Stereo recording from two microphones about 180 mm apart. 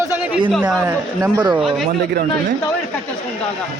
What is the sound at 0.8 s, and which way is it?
Speech, 10° right (ahead or behind).